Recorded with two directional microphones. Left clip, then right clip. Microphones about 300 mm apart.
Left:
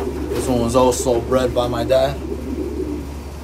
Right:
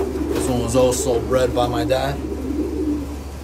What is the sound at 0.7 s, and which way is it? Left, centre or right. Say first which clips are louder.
A man's voice: left 1 dB; centre.